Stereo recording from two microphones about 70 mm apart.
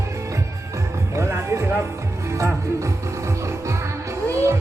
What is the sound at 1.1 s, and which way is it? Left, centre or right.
Music, right.